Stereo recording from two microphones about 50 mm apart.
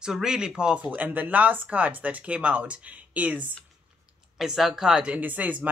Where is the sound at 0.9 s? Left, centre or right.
Right.